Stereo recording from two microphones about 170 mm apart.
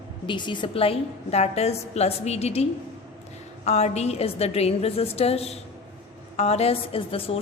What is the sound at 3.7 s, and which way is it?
A woman's voice, 40° left (ahead or behind).